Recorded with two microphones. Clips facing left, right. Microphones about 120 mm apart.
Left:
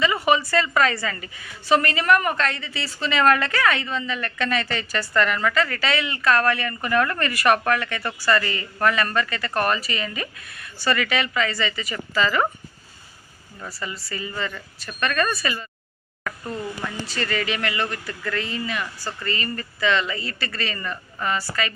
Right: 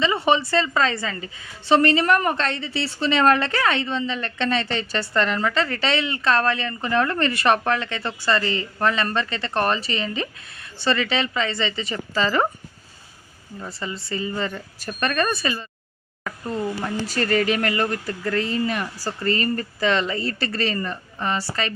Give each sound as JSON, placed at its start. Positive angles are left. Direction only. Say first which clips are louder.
{"t": 0.0, "sound": "a woman's voice", "louder": "even", "side_deg": -25}
{"t": 13.6, "sound": "a woman's voice", "louder": "right 2 dB", "side_deg": -25}
{"t": 16.8, "sound": "speech", "louder": "right 4 dB", "side_deg": -40}